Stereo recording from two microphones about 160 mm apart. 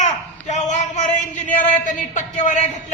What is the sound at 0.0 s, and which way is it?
A man's voice, 50° left (ahead or behind).